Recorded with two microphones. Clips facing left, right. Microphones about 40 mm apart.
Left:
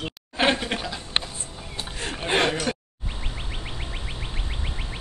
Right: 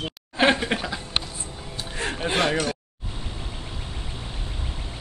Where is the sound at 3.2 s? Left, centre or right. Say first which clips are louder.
Left 1 dB; left.